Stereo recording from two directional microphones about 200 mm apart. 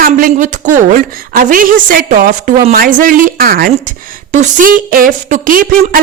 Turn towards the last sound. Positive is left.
turn(degrees=-45)  # may be behind; listen again after turning